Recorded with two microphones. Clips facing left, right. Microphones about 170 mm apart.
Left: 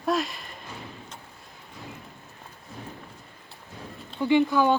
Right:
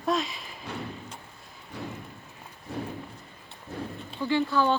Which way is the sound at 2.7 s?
70° right (ahead or behind).